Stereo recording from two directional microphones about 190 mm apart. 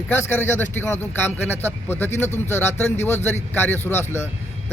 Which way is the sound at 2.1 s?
35° left (ahead or behind).